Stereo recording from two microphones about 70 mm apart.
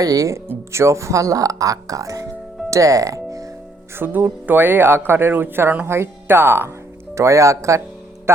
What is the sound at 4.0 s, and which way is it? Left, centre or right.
Music, right.